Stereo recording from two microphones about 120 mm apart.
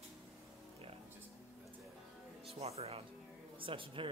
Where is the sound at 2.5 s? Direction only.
60° right (ahead or behind).